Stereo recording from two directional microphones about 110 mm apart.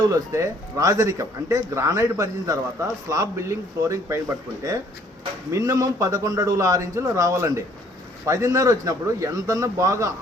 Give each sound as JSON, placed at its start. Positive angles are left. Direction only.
{"t": 0.0, "sound": "a man's voice", "side_deg": -30}
{"t": 5.5, "sound": "a man's voice", "side_deg": -30}